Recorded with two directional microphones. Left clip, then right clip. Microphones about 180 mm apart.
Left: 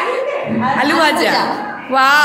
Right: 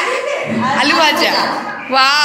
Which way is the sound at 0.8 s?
25° left (ahead or behind).